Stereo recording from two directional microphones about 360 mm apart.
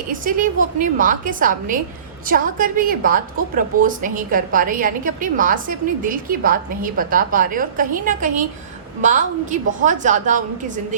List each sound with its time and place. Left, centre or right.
0.1 s a woman's voice: right